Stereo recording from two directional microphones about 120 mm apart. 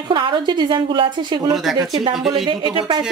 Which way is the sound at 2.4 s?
40° right (ahead or behind).